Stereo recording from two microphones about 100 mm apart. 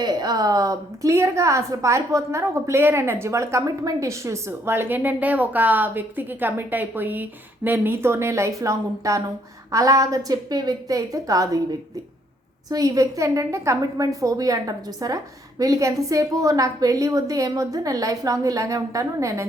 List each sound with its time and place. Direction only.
0.0 s a woman's voice: 45° right (ahead or behind)